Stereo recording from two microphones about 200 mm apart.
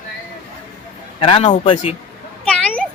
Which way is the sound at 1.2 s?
25° left (ahead or behind).